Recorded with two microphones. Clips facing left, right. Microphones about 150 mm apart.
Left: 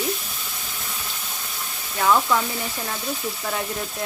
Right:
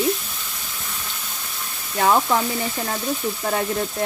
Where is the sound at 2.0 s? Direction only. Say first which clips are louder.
Right 2 dB; 30° right (ahead or behind).